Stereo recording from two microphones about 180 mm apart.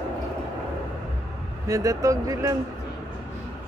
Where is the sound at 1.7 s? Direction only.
20° right (ahead or behind).